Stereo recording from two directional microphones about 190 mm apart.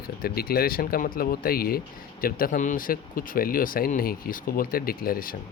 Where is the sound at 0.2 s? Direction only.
55° left (ahead or behind).